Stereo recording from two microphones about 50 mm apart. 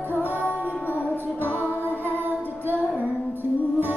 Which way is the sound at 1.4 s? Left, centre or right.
Left.